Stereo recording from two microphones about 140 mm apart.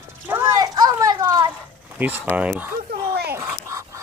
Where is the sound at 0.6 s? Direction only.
30° right (ahead or behind).